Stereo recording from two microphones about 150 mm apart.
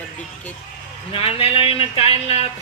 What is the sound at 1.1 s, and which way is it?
Speech, 40° left (ahead or behind).